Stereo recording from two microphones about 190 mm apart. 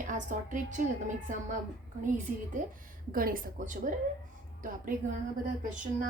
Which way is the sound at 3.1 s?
50° right (ahead or behind).